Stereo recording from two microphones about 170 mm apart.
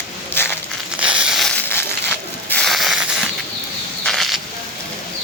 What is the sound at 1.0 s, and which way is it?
Crushing, 5° right (ahead or behind).